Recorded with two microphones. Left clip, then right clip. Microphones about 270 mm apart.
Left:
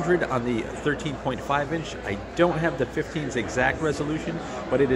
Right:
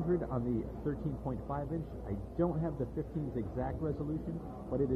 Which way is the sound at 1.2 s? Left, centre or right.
Left.